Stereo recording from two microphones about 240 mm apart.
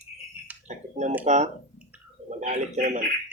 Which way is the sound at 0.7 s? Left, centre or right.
Right.